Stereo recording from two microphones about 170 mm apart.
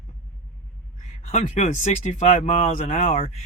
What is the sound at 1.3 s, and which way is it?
Speech, 40° left (ahead or behind).